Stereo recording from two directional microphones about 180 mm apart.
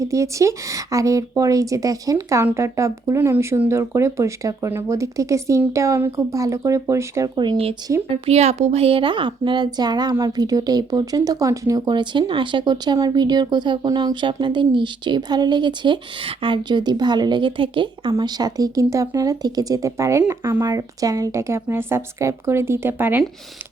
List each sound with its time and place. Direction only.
0.0 s a woman's voice: 15° right (ahead or behind)